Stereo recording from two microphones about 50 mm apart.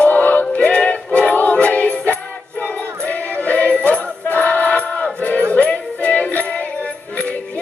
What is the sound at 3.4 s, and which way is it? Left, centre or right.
Jingle bell, left.